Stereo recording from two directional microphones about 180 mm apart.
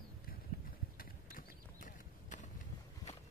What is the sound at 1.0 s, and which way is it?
Clip-clop, 50° left (ahead or behind).